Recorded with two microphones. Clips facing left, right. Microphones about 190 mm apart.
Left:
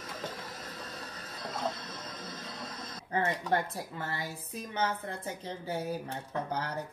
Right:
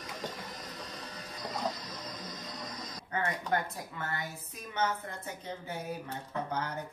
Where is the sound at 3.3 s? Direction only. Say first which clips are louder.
Even; 30° left (ahead or behind).